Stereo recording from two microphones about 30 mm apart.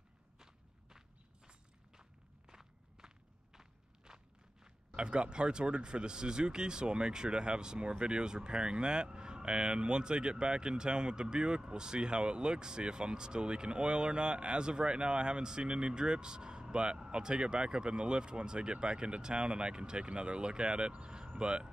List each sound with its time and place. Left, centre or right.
0.4 s walk: centre
4.9 s speech: right